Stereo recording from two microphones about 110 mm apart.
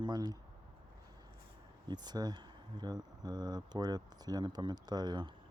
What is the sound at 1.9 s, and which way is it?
Speech, 40° right (ahead or behind).